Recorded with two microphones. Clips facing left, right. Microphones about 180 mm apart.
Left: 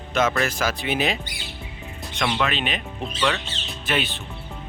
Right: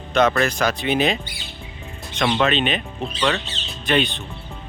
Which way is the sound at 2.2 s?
35° right (ahead or behind).